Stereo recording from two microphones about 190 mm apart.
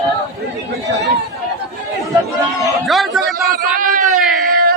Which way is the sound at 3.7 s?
45° right (ahead or behind).